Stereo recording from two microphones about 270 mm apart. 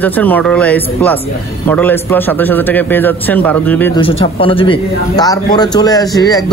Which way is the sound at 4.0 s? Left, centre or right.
Centre.